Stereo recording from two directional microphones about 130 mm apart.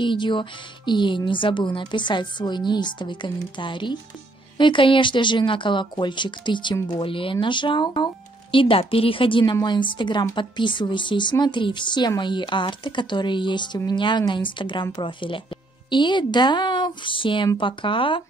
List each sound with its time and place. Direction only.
0.0 s speech: 40° left (ahead or behind)